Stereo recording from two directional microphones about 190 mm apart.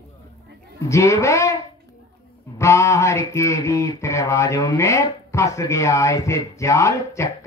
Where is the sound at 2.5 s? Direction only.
15° left (ahead or behind).